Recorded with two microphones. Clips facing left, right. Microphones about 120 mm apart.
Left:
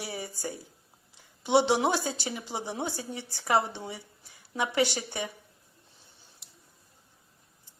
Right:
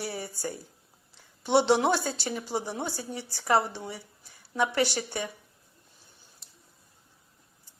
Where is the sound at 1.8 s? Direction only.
15° left (ahead or behind).